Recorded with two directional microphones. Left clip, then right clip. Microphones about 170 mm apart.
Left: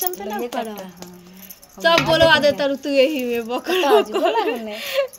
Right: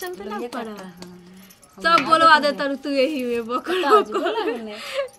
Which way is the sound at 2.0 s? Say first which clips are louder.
Right 1 dB; 15° right (ahead or behind).